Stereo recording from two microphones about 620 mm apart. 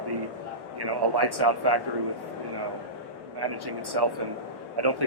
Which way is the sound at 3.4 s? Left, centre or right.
Right.